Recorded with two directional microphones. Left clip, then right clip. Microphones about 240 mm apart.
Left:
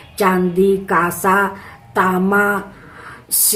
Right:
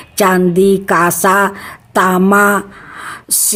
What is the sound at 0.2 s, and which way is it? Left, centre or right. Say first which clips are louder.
Speech: right 4 dB; right.